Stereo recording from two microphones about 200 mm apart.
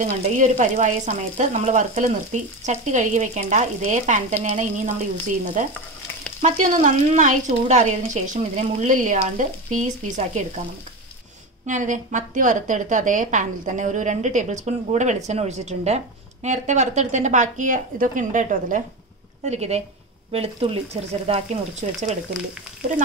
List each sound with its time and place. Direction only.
0.0 s speech: 35° right (ahead or behind)
11.6 s speech: 40° right (ahead or behind)